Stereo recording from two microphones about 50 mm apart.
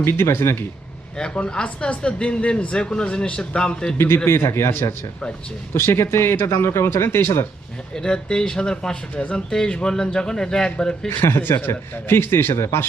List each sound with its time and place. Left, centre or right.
0.0 s speech: left
1.1 s speech: centre
3.9 s speech: left
7.9 s speech: centre
11.1 s a man's voice: left
12.5 s speech: left